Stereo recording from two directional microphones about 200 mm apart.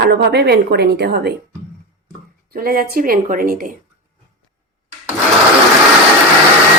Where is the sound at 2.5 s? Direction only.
45° right (ahead or behind).